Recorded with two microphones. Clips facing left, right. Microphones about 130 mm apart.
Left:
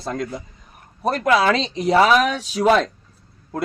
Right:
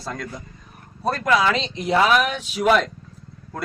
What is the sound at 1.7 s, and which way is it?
Speech, 35° left (ahead or behind).